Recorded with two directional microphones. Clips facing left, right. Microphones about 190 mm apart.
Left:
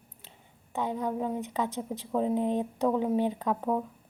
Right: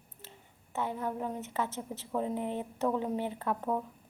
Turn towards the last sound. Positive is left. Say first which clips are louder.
# left 4 dB
turn(degrees=10)  # may be behind; listen again after turning